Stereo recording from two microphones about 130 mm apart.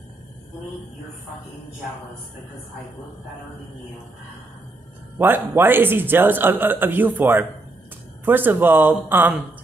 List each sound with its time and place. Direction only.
5.2 s speech: 15° right (ahead or behind)